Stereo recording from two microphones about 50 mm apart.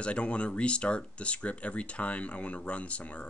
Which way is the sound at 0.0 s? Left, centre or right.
Left.